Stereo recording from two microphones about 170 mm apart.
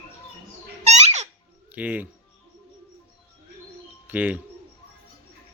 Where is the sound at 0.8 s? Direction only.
40° right (ahead or behind).